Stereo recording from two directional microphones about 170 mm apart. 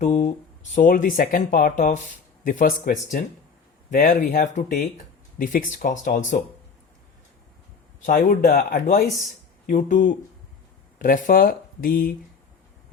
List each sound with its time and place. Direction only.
0.0 s a sound: 45° left (ahead or behind)
0.8 s speech: 50° left (ahead or behind)
8.0 s speech: 55° left (ahead or behind)